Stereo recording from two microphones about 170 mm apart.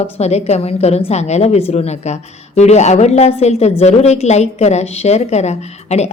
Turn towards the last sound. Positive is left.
turn(degrees=40)  # may be behind; listen again after turning